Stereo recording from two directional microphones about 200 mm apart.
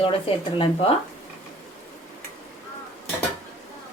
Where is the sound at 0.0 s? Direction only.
30° left (ahead or behind).